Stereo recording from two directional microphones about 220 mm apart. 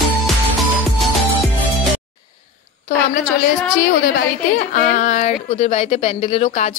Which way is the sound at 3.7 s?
45° left (ahead or behind).